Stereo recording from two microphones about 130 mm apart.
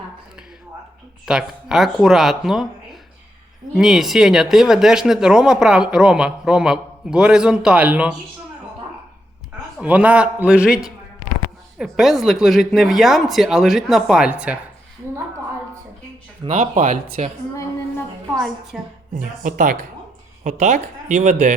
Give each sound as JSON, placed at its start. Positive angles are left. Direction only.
{"t": 1.2, "sound": "speech", "side_deg": -5}
{"t": 3.8, "sound": "speech", "side_deg": -5}
{"t": 9.8, "sound": "a man's voice", "side_deg": -10}
{"t": 16.5, "sound": "speech", "side_deg": -80}
{"t": 18.3, "sound": "speech", "side_deg": 0}
{"t": 19.1, "sound": "speech", "side_deg": -90}
{"t": 20.4, "sound": "speech", "side_deg": -70}